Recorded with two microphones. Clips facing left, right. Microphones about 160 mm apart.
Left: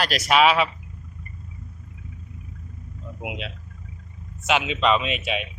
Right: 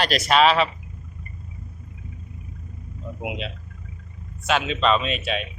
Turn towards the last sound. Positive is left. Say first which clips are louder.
# right 1 dB
turn(degrees=15)  # may be behind; listen again after turning